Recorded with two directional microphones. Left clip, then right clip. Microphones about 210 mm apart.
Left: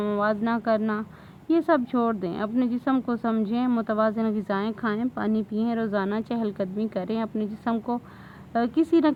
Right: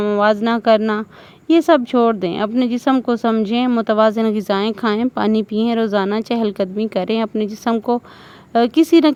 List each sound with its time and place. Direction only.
0.0 s speech: 35° right (ahead or behind)